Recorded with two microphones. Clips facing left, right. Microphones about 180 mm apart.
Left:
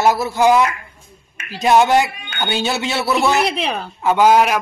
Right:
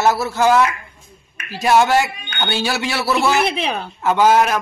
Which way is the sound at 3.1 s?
Centre (ahead or behind).